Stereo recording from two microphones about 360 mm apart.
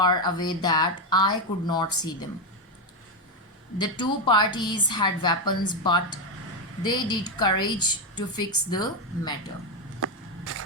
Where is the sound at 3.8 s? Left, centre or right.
Centre.